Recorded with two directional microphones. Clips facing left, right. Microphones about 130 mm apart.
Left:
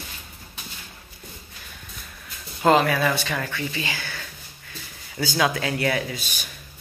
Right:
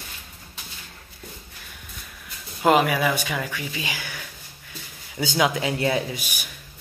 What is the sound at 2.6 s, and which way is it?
Speech, 10° right (ahead or behind).